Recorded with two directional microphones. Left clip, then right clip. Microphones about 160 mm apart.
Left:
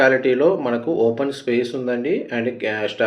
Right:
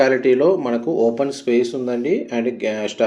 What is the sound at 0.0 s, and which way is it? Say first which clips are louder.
Speech: right 1 dB; 35° right (ahead or behind).